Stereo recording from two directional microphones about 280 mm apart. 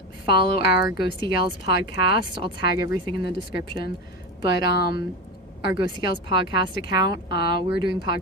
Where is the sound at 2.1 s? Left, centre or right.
Centre.